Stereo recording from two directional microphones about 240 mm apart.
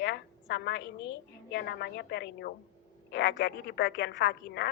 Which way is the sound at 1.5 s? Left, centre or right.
Left.